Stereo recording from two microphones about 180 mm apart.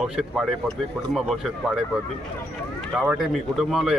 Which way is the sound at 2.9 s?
Centre (ahead or behind).